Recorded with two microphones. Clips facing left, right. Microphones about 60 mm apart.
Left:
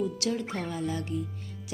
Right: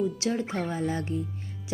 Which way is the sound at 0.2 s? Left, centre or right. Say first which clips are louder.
Right 2 dB; right.